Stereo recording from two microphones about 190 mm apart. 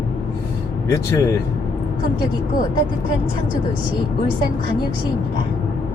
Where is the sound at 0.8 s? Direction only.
15° left (ahead or behind).